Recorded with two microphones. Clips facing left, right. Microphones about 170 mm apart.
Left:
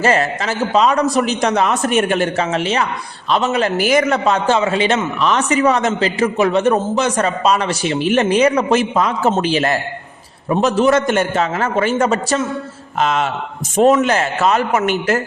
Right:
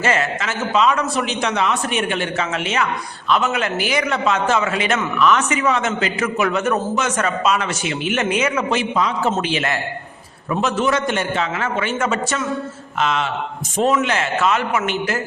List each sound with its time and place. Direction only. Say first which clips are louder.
0.0 s a man's voice: left 4 dB; 35° left (ahead or behind)